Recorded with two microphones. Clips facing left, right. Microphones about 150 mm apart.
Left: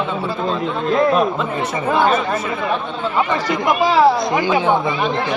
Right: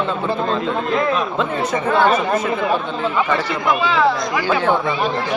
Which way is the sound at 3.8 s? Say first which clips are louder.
Left 5 dB; 35° left (ahead or behind).